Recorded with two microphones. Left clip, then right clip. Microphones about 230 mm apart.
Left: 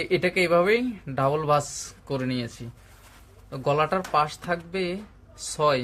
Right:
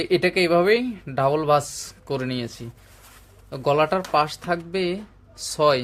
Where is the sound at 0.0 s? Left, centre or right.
Right.